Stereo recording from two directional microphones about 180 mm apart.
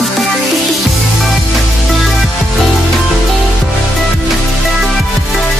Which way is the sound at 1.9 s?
Centre (ahead or behind).